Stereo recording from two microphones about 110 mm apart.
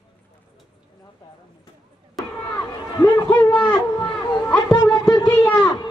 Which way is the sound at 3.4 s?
10° left (ahead or behind).